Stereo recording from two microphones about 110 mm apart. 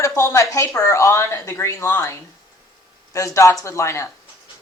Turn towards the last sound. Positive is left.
turn(degrees=25)  # may be behind; listen again after turning